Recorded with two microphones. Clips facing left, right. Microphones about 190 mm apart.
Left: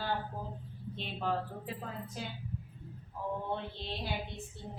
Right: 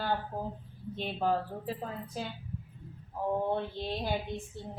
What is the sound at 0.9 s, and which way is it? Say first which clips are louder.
Speech: right 5 dB; 45° right (ahead or behind).